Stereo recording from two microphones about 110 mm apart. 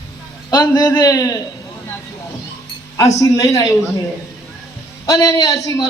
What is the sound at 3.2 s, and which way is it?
Speech, 30° left (ahead or behind).